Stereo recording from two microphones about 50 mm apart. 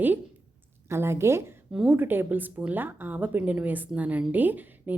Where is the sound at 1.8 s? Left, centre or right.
Right.